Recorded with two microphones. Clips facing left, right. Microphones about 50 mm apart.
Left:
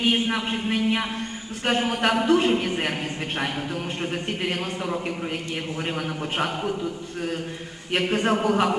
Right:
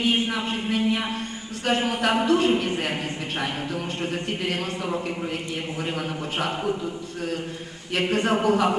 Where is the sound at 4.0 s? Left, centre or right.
Left.